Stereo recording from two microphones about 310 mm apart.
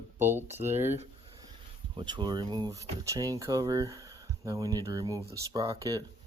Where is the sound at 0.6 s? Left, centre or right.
Right.